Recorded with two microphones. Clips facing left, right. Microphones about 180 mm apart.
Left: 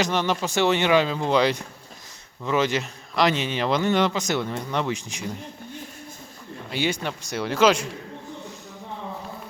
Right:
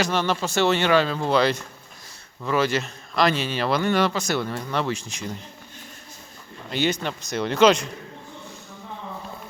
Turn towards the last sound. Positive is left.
turn(degrees=5)  # may be behind; listen again after turning